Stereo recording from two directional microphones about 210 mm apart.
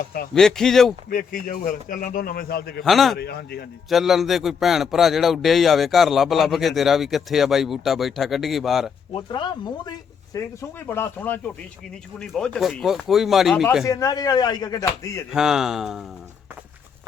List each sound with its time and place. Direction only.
0.3 s a man's voice: 5° left (ahead or behind)
1.1 s a man's voice: 40° left (ahead or behind)
2.8 s a man's voice: centre (ahead or behind)
3.2 s a man's voice: 50° left (ahead or behind)
3.8 s a man's voice: centre (ahead or behind)
9.1 s a man's voice: 20° left (ahead or behind); by 13.7 s centre (ahead or behind)
13.8 s speech: 15° left (ahead or behind)
15.3 s a man's voice: 5° right (ahead or behind)